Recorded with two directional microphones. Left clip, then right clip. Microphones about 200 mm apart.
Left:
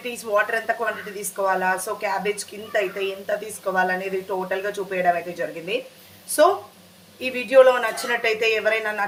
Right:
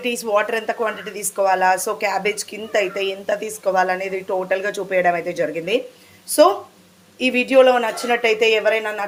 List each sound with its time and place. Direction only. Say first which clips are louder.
0.0 s a woman's voice: right 3 dB; 35° right (ahead or behind)
7.2 s a woman's voice: right 2 dB; 40° right (ahead or behind)